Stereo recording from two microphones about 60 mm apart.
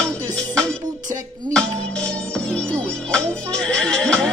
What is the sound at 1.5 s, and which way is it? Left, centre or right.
Music, centre.